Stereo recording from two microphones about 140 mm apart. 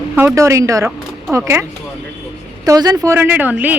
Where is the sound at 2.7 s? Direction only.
30° right (ahead or behind).